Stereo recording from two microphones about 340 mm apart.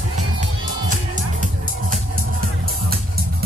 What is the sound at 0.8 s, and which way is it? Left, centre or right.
Music, right.